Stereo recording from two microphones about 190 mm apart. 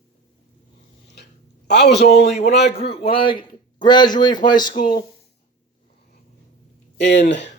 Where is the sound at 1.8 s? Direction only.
65° left (ahead or behind).